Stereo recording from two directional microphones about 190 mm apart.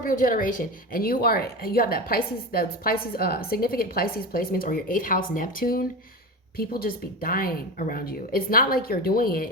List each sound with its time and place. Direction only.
0.0 s a woman's voice: 45° left (ahead or behind)